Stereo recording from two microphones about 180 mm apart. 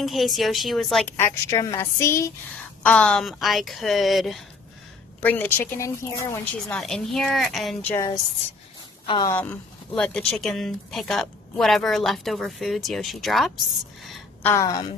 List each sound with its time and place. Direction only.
0.0 s speech: centre (ahead or behind); by 2.3 s 15° left (ahead or behind)
2.8 s speech: 5° left (ahead or behind)
9.0 s a woman's voice: 25° left (ahead or behind)
9.3 s speech: 5° left (ahead or behind)
14.4 s speech: 15° left (ahead or behind)